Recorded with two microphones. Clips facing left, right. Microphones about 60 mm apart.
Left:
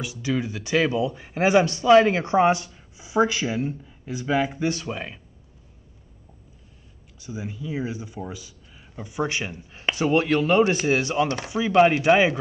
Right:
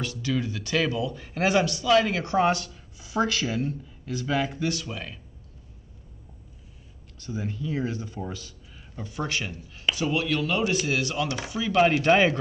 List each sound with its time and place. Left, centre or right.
0.0 s speech: centre
7.2 s speech: centre